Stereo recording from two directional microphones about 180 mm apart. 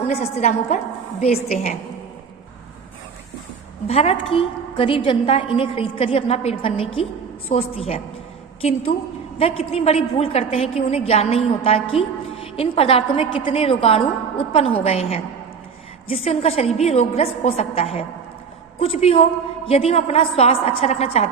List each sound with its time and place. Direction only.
0.1 s a woman's voice: 40° left (ahead or behind)
3.8 s a woman's voice: 35° left (ahead or behind)